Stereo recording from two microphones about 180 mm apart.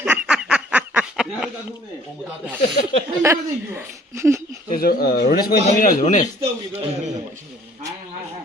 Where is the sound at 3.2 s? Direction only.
10° right (ahead or behind).